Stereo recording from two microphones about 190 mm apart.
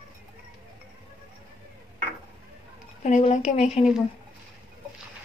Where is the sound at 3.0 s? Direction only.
35° left (ahead or behind).